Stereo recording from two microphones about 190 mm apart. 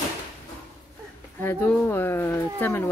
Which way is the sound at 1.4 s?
10° left (ahead or behind).